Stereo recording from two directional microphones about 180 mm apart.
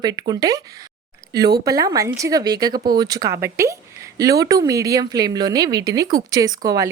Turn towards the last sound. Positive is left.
turn(degrees=-20)  # may be behind; listen again after turning